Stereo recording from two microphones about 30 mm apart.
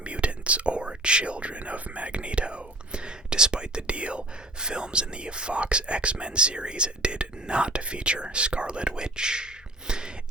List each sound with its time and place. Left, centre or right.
0.0 s whispering: right